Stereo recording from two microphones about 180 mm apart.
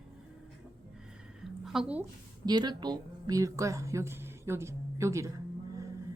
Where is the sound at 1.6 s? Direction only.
5° right (ahead or behind).